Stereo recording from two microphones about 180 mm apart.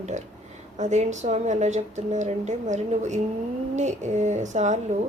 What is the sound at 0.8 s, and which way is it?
A woman's voice, 40° right (ahead or behind).